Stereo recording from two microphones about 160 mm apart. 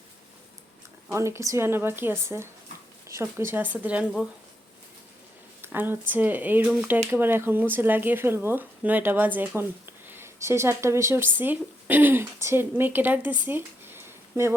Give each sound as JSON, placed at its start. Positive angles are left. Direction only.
{"t": 1.1, "sound": "speech", "side_deg": -15}
{"t": 5.6, "sound": "speech", "side_deg": -15}